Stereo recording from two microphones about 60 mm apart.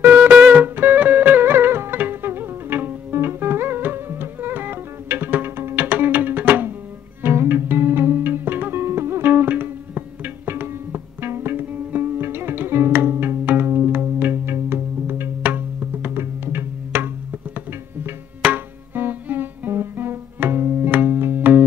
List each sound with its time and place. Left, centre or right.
0.0 s music: right